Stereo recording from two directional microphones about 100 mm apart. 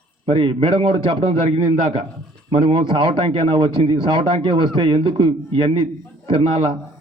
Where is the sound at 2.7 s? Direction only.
60° right (ahead or behind).